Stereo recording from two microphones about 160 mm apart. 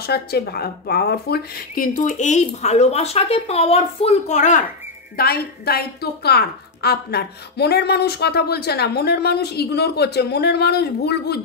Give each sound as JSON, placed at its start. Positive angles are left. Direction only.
{"t": 0.0, "sound": "speech", "side_deg": 80}
{"t": 2.0, "sound": "speech", "side_deg": 50}
{"t": 5.1, "sound": "a woman's voice", "side_deg": 70}